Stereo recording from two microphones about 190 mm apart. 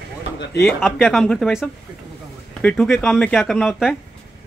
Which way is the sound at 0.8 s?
Centre (ahead or behind).